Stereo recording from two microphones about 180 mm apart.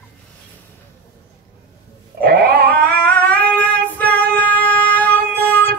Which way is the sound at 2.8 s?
10° left (ahead or behind).